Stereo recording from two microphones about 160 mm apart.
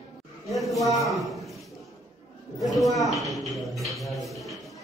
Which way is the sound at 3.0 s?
Centre (ahead or behind).